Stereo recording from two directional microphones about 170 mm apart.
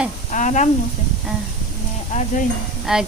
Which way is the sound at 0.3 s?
45° left (ahead or behind).